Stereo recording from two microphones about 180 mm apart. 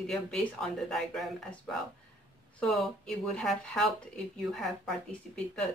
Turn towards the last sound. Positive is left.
turn(degrees=0)  # may be behind; listen again after turning